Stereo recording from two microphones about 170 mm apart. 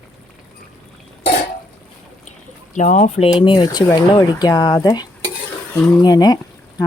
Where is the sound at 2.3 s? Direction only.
45° left (ahead or behind).